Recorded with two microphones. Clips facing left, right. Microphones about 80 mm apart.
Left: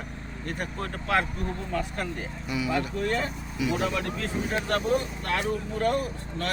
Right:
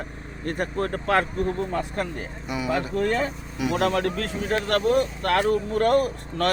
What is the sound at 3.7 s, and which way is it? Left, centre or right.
Speech, right.